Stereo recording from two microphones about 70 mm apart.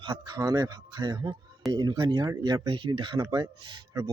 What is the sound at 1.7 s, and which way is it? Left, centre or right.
Speech, right.